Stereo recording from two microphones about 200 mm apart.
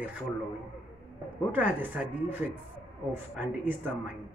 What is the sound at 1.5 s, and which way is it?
A woman's voice, 10° right (ahead or behind).